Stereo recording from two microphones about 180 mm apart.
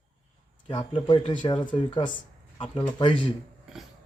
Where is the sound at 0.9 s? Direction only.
25° left (ahead or behind).